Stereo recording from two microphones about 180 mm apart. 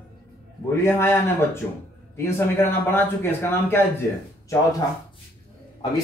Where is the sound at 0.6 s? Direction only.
15° left (ahead or behind).